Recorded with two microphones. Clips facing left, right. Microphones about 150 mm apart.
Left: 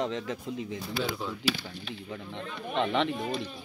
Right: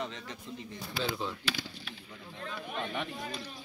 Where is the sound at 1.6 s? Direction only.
80° left.